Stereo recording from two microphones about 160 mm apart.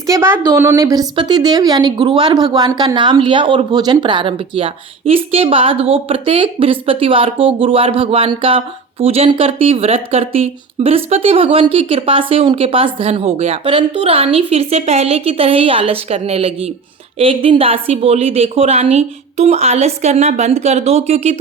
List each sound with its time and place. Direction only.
0.1 s a woman's voice: 15° right (ahead or behind); by 21.3 s 40° right (ahead or behind)